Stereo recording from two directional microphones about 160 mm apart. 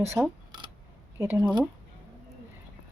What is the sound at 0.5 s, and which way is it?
Camera, 25° right (ahead or behind).